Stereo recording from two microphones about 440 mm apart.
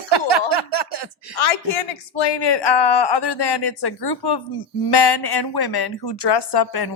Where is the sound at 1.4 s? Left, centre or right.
Left.